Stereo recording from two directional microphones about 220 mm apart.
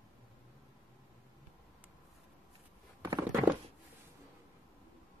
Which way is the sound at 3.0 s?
15° right (ahead or behind).